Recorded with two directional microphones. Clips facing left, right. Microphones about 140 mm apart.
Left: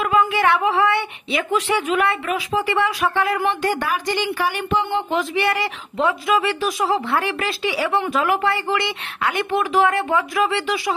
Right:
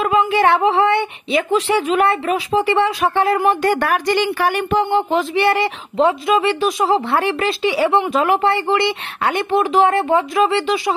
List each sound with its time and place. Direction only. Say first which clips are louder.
0.0 s speech: right 3 dB; 30° right (ahead or behind)
3.4 s speech: right 5 dB; 55° right (ahead or behind)
4.9 s speech: right 4 dB; 30° right (ahead or behind)